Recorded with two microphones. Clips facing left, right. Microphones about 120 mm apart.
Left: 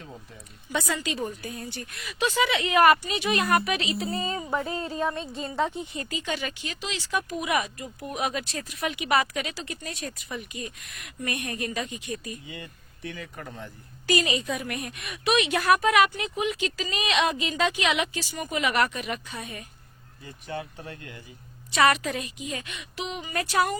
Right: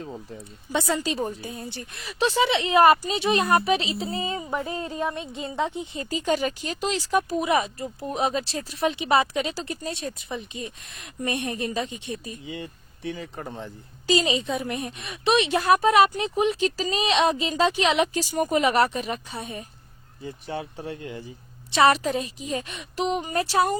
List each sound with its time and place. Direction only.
0.0 s a woman's voice: 30° right (ahead or behind)
6.1 s a woman's voice: 40° right (ahead or behind)